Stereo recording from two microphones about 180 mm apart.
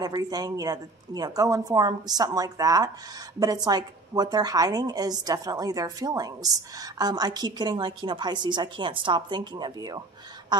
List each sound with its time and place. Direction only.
0.0 s a woman's voice: 20° right (ahead or behind)